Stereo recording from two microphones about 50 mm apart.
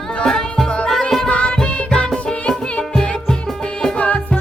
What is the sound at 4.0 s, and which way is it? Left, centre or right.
Music, left.